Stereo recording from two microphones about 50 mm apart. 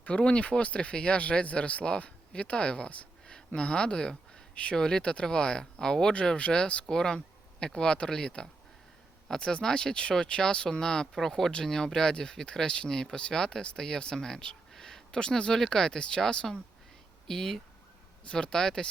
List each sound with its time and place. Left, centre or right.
0.0 s speech: left